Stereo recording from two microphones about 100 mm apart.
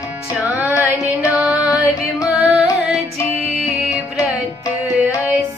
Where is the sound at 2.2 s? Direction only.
5° right (ahead or behind).